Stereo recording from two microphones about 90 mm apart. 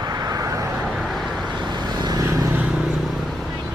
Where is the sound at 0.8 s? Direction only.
Centre (ahead or behind).